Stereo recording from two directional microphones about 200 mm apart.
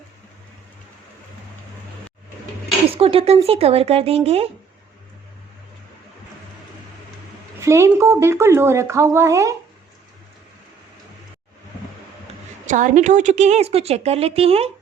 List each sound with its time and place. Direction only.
2.9 s speech: 30° right (ahead or behind)
7.6 s speech: 15° right (ahead or behind)
12.6 s a woman's voice: 40° right (ahead or behind)